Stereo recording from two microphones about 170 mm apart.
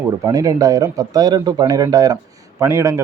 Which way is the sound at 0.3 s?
20° right (ahead or behind).